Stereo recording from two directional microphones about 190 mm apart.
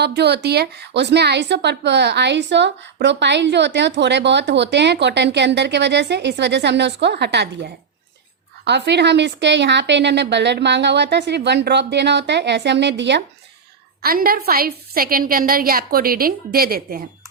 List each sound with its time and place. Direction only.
0.0 s a woman's voice: 60° right (ahead or behind)
14.0 s a woman's voice: 50° right (ahead or behind)